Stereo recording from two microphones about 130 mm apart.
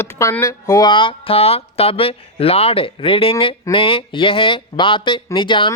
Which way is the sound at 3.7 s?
45° left (ahead or behind).